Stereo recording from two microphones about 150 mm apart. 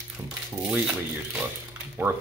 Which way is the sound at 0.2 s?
15° right (ahead or behind).